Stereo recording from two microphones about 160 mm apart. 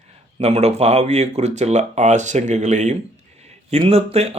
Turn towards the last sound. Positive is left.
turn(degrees=-40)  # may be behind; listen again after turning